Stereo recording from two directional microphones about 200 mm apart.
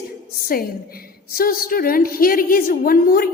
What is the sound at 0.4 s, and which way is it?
A woman's voice, 45° left (ahead or behind).